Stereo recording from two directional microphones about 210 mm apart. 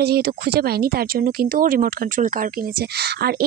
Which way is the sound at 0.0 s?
50° right (ahead or behind).